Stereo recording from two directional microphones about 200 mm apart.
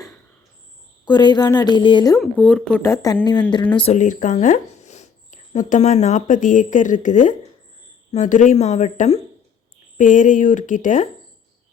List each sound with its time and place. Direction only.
1.0 s a woman's voice: 20° left (ahead or behind)
2.1 s speech: 5° left (ahead or behind)
3.8 s speech: 30° left (ahead or behind)